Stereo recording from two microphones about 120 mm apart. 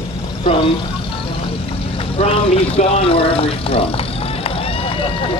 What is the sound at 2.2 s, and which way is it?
Speech, 55° left (ahead or behind).